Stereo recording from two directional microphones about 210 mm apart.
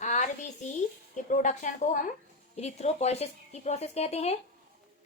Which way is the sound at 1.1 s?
35° left (ahead or behind).